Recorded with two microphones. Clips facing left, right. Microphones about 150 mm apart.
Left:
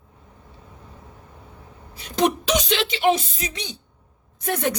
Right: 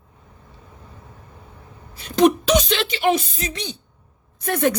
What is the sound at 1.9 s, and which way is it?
A woman's voice, 20° left (ahead or behind).